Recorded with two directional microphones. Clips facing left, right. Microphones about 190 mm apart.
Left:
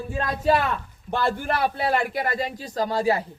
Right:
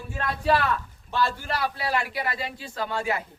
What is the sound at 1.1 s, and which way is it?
A man's voice, 55° left (ahead or behind).